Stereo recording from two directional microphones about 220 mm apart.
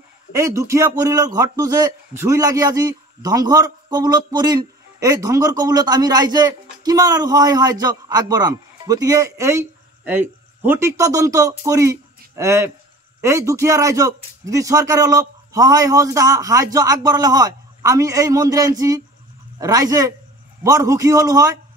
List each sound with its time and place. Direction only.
0.3 s a man's voice: 15° right (ahead or behind)